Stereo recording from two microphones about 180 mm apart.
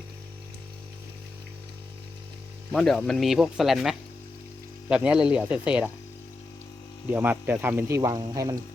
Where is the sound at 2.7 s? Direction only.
Centre (ahead or behind).